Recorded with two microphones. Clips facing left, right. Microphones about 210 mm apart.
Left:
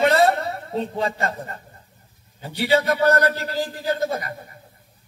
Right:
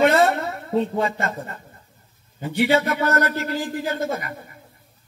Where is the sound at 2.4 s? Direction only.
35° left (ahead or behind).